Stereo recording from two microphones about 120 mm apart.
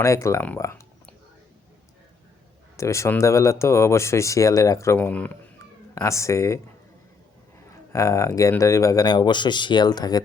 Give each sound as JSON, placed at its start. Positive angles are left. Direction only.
{"t": 0.0, "sound": "speech", "side_deg": 25}
{"t": 2.7, "sound": "speech", "side_deg": 25}
{"t": 4.9, "sound": "speech", "side_deg": 10}
{"t": 5.5, "sound": "cat", "side_deg": 25}
{"t": 7.7, "sound": "speech", "side_deg": 25}